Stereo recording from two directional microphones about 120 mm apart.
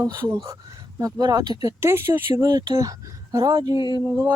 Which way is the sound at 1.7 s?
20° right (ahead or behind).